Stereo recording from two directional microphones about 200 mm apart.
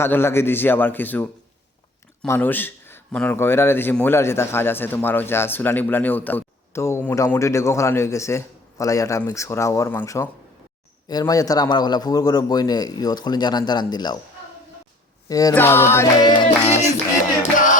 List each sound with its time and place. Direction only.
0.0 s a man's voice: 10° left (ahead or behind)
15.3 s speech: 15° left (ahead or behind)
16.4 s a sound: 30° left (ahead or behind)